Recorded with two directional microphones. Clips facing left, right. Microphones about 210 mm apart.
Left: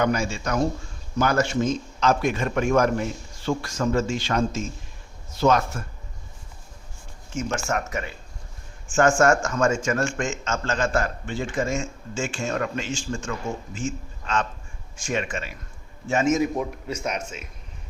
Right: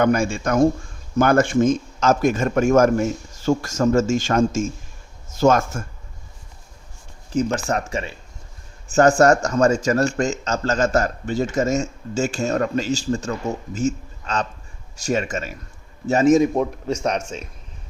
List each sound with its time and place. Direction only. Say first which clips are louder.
0.0 s a man's voice: right 5 dB; 50° right (ahead or behind)
7.3 s a man's voice: right 6 dB; 35° right (ahead or behind)